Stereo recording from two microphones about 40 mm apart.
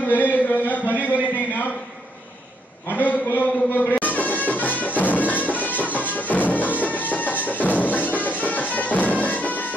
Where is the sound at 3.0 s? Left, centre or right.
Left.